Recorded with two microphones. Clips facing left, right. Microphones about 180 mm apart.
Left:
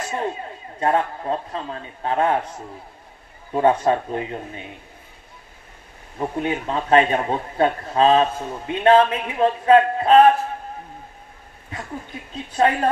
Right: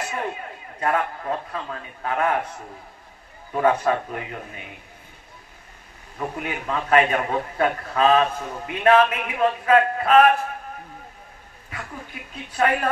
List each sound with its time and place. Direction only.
0.7 s a man's voice: 30° left (ahead or behind)
3.5 s a man's voice: 30° left (ahead or behind)
6.1 s a man's voice: 30° left (ahead or behind)
11.7 s speech: 30° left (ahead or behind)